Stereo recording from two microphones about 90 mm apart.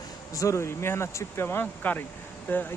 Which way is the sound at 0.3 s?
35° left (ahead or behind).